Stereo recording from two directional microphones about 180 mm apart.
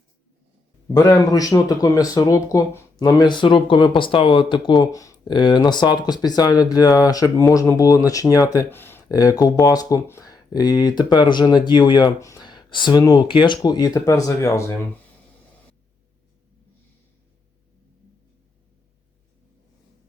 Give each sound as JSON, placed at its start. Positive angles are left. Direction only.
{"t": 0.9, "sound": "speech", "side_deg": 20}